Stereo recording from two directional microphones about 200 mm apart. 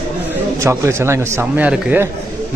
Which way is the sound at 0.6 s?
15° right (ahead or behind).